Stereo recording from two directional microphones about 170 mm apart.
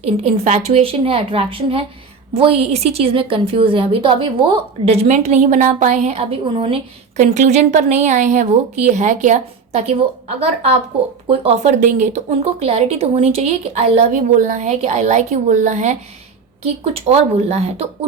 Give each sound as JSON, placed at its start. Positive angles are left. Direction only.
{"t": 0.0, "sound": "a woman's voice", "side_deg": -40}